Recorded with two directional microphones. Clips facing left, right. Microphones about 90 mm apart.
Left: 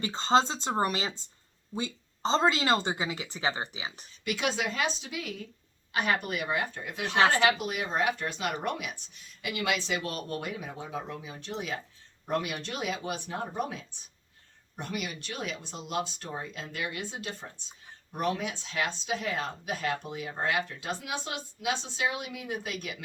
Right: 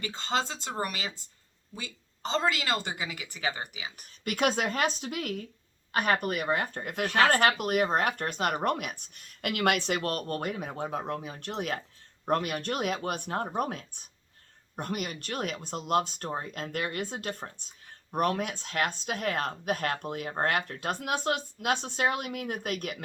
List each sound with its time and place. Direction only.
0.0 s speech: 25° left (ahead or behind)
4.2 s speech: 50° right (ahead or behind)